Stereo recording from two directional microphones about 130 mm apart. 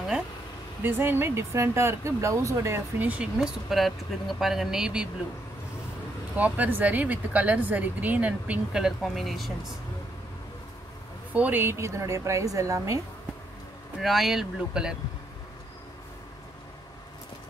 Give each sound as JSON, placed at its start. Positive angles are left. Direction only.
{"t": 0.8, "sound": "speech", "side_deg": -15}
{"t": 6.3, "sound": "speech", "side_deg": -10}
{"t": 11.3, "sound": "a woman's voice", "side_deg": -15}
{"t": 13.9, "sound": "speech", "side_deg": 0}